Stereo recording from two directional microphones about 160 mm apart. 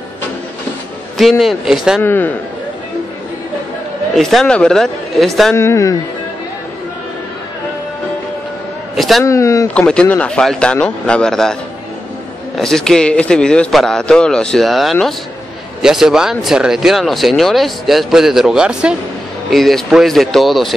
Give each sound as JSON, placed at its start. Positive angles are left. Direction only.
{"t": 1.1, "sound": "speech", "side_deg": 0}
{"t": 2.0, "sound": "speech", "side_deg": 10}
{"t": 4.1, "sound": "speech", "side_deg": 0}
{"t": 5.6, "sound": "speech", "side_deg": 20}
{"t": 8.9, "sound": "a sound", "side_deg": 0}
{"t": 9.2, "sound": "speech", "side_deg": 20}
{"t": 9.8, "sound": "speech", "side_deg": 5}
{"t": 12.5, "sound": "speech", "side_deg": 5}